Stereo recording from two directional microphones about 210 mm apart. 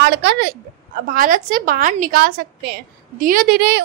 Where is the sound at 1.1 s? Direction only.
40° right (ahead or behind).